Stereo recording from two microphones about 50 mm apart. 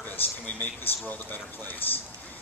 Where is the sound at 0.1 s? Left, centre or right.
Left.